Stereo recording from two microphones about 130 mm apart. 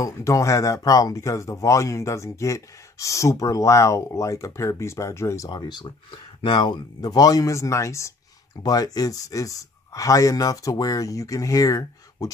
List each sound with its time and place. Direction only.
0.0 s speech: 25° left (ahead or behind)
5.5 s speech: 35° left (ahead or behind)